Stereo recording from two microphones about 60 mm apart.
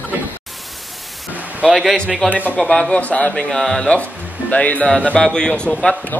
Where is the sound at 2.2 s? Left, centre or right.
Right.